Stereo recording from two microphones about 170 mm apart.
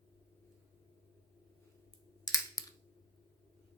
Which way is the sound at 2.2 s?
20° left (ahead or behind).